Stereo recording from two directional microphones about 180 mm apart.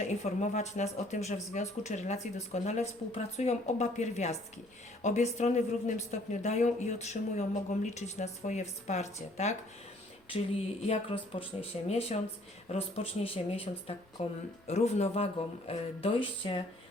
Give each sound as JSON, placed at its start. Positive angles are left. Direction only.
{"t": 0.1, "sound": "speech", "side_deg": 40}
{"t": 10.8, "sound": "speech", "side_deg": 30}